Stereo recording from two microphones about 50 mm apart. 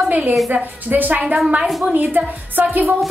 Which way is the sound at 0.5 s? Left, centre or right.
Right.